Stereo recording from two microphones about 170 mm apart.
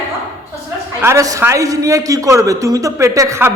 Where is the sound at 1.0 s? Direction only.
20° right (ahead or behind).